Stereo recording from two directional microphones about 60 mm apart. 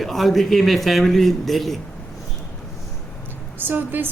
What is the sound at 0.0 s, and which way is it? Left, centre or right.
A man's voice, centre.